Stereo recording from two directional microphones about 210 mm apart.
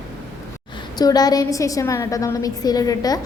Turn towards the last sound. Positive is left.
turn(degrees=15)  # may be behind; listen again after turning